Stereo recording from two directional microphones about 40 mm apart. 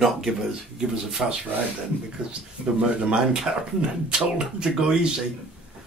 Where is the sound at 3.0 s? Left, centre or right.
Right.